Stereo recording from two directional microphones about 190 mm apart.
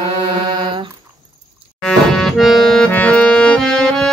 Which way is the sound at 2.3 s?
Centre (ahead or behind).